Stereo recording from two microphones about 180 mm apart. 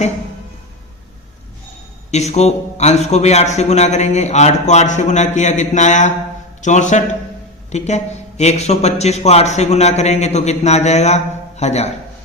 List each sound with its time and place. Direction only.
2.0 s a man's voice: 35° left (ahead or behind)